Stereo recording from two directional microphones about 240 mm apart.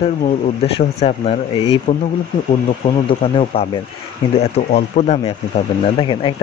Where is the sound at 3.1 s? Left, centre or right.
Left.